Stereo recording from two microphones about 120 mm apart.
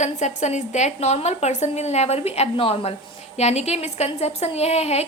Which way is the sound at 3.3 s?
65° left (ahead or behind).